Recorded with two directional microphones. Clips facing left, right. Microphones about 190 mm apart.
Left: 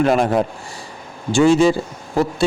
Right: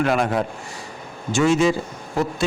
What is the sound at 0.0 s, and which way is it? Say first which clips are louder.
Speech: left 4 dB; 35° left (ahead or behind).